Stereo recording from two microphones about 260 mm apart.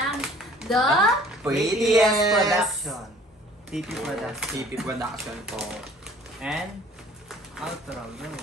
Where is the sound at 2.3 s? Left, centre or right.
Centre.